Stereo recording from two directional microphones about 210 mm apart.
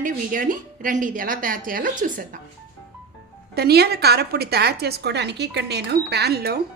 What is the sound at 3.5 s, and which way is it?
A woman's voice, 50° right (ahead or behind).